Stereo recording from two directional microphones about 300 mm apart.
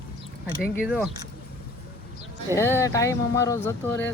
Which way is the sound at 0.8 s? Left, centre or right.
Centre.